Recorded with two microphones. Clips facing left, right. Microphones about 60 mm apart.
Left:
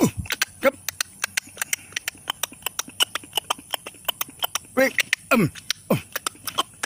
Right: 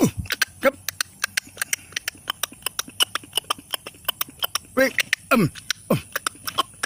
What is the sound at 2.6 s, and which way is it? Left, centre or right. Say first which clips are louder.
Horse: even; centre.